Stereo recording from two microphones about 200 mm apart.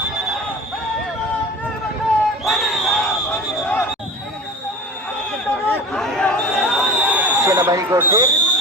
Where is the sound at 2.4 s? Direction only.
Centre (ahead or behind).